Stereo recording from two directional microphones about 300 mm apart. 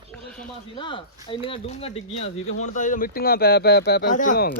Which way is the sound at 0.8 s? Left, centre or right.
Centre.